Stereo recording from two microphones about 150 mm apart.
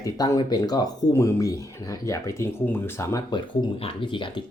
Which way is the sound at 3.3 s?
35° left (ahead or behind).